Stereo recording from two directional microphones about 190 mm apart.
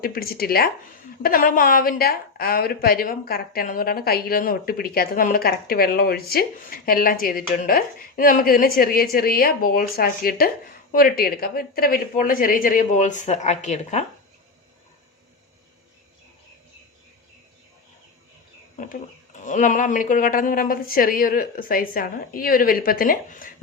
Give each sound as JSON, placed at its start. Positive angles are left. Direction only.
{"t": 0.0, "sound": "a woman's voice", "side_deg": 50}
{"t": 19.5, "sound": "a woman's voice", "side_deg": 40}